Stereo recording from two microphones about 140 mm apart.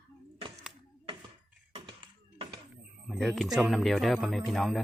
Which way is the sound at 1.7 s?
35° right (ahead or behind).